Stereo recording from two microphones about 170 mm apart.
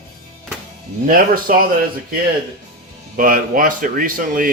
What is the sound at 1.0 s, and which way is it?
Speech, 55° right (ahead or behind).